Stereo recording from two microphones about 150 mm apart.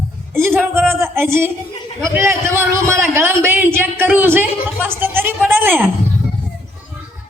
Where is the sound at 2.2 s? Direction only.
15° right (ahead or behind).